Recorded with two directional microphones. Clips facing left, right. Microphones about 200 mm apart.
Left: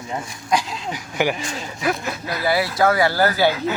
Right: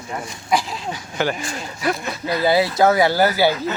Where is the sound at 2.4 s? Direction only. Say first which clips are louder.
Right 3 dB; 20° right (ahead or behind).